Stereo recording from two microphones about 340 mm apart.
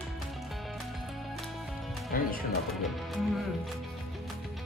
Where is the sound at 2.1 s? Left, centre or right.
Left.